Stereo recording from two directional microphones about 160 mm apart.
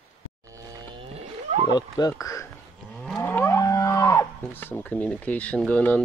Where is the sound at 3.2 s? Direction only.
15° left (ahead or behind).